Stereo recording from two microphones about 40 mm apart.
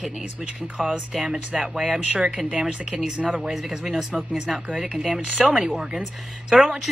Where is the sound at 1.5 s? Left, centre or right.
Centre.